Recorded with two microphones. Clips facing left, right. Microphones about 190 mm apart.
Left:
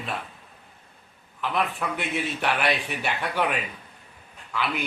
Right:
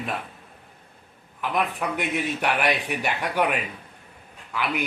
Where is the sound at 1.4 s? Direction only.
10° right (ahead or behind).